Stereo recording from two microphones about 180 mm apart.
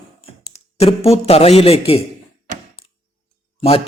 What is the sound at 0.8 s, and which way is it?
Speech, 35° left (ahead or behind).